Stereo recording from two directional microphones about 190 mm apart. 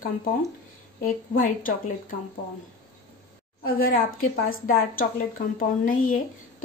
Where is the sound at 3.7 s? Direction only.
50° left (ahead or behind).